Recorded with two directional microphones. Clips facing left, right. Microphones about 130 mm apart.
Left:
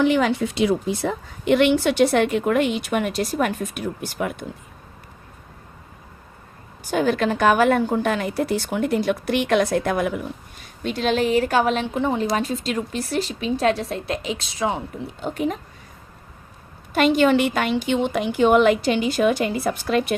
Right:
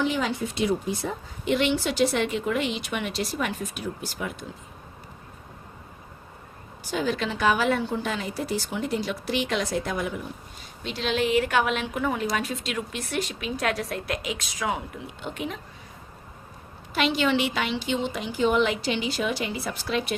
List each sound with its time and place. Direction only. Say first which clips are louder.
0.0 s a woman's voice: left 7 dB; 65° left (ahead or behind)
6.9 s a woman's voice: left 7 dB; 55° left (ahead or behind)
10.8 s a woman's voice: left 5 dB; 45° left (ahead or behind)
16.9 s a woman's voice: left 7 dB; 50° left (ahead or behind)